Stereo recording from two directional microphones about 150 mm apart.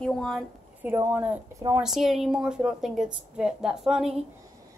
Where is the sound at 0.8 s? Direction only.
10° right (ahead or behind).